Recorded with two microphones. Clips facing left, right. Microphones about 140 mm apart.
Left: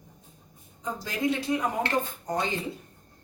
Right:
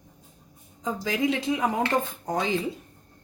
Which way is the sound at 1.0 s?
90° right.